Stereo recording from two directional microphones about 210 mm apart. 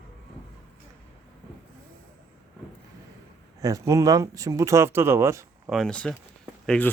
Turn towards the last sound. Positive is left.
turn(degrees=5)  # may be behind; listen again after turning